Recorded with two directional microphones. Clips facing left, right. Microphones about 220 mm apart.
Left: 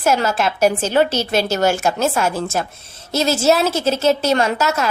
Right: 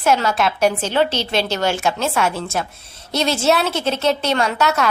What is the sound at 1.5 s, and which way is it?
Speech, 45° left (ahead or behind).